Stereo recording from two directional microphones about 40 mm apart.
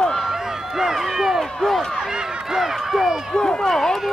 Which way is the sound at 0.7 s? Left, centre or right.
Centre.